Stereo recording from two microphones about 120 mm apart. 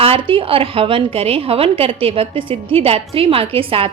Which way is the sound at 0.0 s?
50° right (ahead or behind).